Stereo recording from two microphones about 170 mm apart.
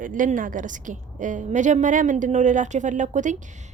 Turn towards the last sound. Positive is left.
turn(degrees=-45)  # may be behind; listen again after turning